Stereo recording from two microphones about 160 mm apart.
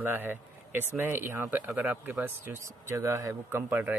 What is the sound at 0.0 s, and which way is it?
Speech, 10° right (ahead or behind).